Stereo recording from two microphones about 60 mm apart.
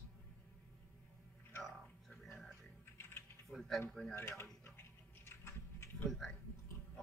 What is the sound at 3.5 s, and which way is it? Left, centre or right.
Speech, centre.